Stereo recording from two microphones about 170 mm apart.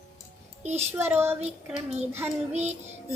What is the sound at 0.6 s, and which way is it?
Speech, 40° right (ahead or behind).